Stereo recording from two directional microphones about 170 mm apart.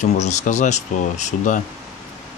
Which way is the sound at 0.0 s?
45° left (ahead or behind).